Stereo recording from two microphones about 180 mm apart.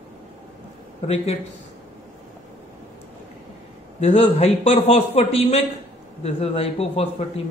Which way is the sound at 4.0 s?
35° left (ahead or behind).